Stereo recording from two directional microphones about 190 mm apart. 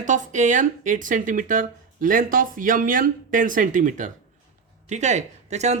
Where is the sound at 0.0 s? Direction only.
40° right (ahead or behind).